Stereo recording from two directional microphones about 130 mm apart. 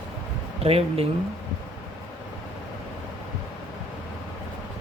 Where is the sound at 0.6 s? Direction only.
50° right (ahead or behind).